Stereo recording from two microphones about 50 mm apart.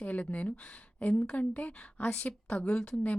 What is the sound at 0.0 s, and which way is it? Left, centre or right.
A woman's voice, left.